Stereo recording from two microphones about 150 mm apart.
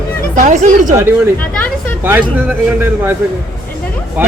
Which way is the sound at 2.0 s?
15° right (ahead or behind).